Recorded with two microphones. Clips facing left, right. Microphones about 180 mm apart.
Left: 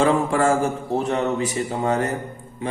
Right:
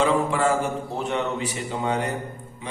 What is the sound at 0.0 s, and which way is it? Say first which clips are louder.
Speech: left 3 dB; 45° left (ahead or behind).